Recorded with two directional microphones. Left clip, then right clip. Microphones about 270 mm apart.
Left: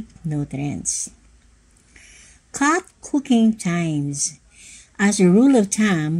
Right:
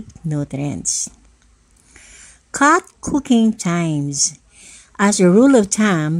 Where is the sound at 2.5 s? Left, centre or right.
Right.